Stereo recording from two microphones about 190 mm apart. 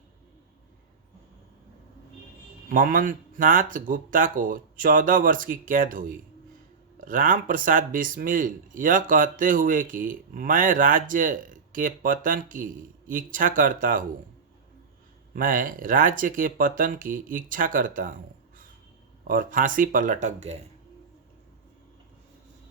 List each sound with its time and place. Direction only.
2.6 s speech: 45° right (ahead or behind)
15.3 s speech: 45° right (ahead or behind)